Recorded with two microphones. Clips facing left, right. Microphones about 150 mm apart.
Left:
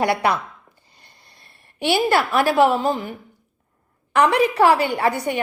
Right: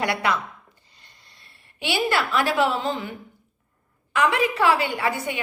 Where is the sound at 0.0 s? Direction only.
35° left (ahead or behind).